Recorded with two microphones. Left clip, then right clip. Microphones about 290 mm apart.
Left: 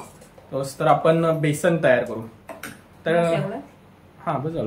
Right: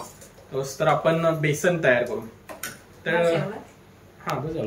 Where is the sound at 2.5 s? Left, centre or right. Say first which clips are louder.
Right 1 dB; centre.